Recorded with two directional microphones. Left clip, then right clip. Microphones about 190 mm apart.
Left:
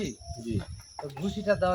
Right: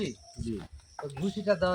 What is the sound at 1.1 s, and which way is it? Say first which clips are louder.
Speech: left 1 dB; 10° right (ahead or behind).